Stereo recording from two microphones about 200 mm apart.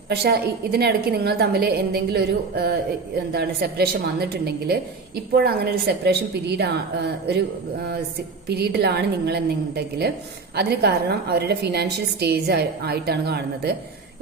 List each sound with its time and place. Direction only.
0.1 s a woman's voice: 55° right (ahead or behind)
8.4 s a woman's voice: 55° right (ahead or behind)